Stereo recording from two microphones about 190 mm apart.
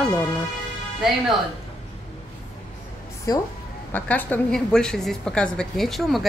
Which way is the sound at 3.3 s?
20° left (ahead or behind).